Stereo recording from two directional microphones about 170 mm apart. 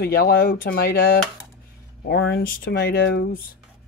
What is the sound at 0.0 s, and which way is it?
Speech, 70° left (ahead or behind).